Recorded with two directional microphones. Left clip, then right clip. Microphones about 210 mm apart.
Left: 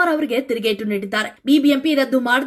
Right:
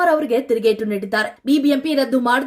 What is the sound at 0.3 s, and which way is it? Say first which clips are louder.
Speech: right 3 dB; 5° right (ahead or behind).